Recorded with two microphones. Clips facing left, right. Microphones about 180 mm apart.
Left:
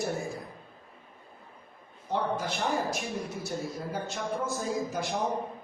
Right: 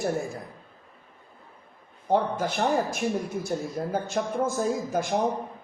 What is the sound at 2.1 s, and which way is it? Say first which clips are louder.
Speech: right 5 dB; 50° right (ahead or behind).